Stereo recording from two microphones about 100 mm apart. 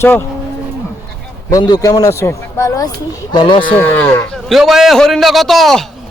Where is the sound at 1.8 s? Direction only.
35° left (ahead or behind).